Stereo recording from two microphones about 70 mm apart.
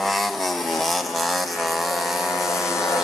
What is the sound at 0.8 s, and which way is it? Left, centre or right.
Vehicle, centre.